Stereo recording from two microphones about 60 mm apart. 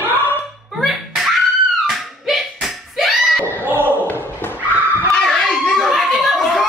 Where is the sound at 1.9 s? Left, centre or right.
Centre.